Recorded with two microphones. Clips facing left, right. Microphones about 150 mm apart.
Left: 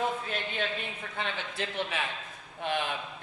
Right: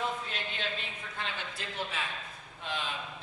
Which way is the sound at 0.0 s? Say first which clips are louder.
Left 4 dB; 50° left (ahead or behind).